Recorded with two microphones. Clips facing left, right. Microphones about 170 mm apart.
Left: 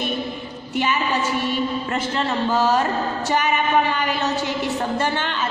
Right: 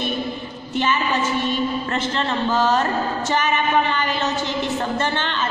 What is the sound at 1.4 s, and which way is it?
A woman's voice, 10° left (ahead or behind).